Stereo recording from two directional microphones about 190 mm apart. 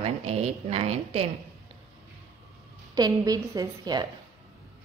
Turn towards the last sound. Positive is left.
turn(degrees=-20)  # may be behind; listen again after turning